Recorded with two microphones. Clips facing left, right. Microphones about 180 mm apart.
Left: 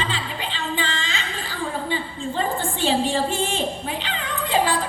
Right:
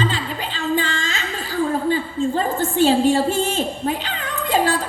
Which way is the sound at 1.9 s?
40° right (ahead or behind).